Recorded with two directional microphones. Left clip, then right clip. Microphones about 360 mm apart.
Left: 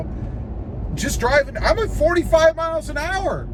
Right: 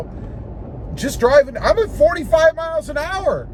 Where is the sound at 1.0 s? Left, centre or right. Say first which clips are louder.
Right 5 dB; centre.